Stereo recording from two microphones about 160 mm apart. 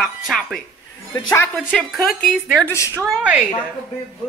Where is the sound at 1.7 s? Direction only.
Centre (ahead or behind).